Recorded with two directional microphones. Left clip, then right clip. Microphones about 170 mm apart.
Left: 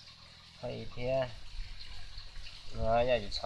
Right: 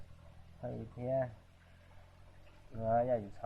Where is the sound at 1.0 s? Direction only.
35° left (ahead or behind).